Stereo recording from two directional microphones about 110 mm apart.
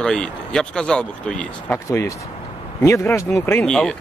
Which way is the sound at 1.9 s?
25° left (ahead or behind).